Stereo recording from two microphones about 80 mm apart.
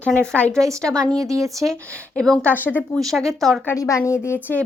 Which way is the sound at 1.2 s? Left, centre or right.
Right.